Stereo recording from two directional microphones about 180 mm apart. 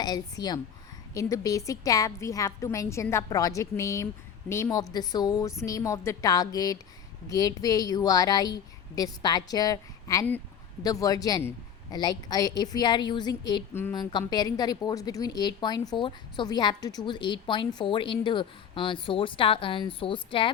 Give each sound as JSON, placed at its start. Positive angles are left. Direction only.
{"t": 0.0, "sound": "a woman's voice", "side_deg": 20}